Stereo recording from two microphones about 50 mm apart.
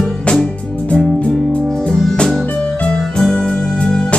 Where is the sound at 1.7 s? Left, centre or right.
Centre.